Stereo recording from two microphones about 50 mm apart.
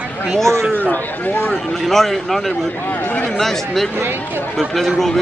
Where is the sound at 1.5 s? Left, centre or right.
Centre.